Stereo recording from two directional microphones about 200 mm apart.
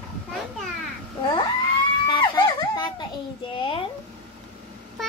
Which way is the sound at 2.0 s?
25° left (ahead or behind).